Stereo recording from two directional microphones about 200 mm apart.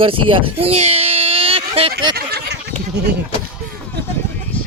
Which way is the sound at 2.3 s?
55° right (ahead or behind).